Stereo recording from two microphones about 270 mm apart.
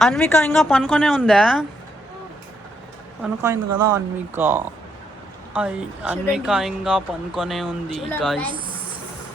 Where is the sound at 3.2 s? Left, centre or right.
Centre.